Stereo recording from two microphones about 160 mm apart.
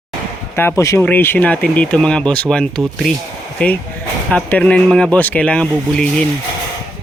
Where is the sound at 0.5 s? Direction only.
15° left (ahead or behind).